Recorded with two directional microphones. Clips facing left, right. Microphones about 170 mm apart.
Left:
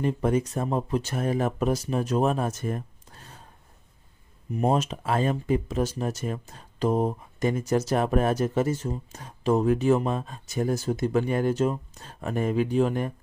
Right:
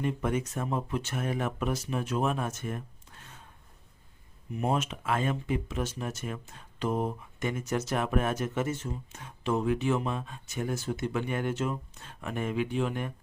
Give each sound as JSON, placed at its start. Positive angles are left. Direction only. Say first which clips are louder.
{"t": 0.0, "sound": "speech", "louder": "left 6 dB", "side_deg": 35}
{"t": 4.5, "sound": "speech", "louder": "left 5 dB", "side_deg": 35}